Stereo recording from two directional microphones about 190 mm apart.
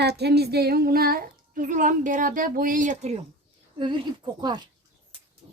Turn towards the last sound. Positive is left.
turn(degrees=-25)  # may be behind; listen again after turning